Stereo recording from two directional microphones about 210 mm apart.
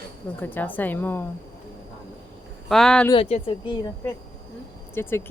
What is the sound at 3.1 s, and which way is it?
A woman's voice, 25° left (ahead or behind).